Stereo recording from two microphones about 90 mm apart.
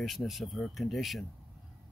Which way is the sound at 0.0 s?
Centre (ahead or behind).